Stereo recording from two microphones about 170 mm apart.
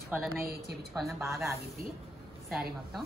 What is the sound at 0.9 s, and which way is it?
Speech, centre (ahead or behind).